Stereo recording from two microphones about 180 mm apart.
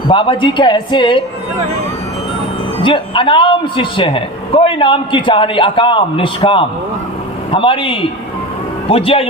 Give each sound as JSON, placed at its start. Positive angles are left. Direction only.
{"t": 0.1, "sound": "a man's voice", "side_deg": 30}
{"t": 2.8, "sound": "a man's voice", "side_deg": 25}